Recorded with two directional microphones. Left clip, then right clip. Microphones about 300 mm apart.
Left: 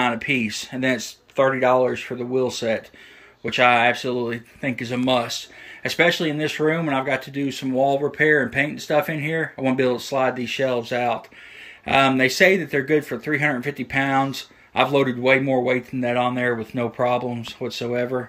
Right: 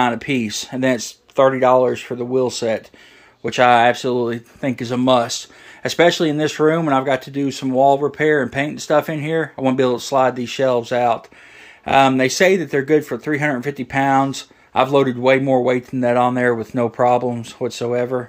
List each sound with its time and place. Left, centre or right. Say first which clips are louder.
0.0 s speech: right 3 dB; centre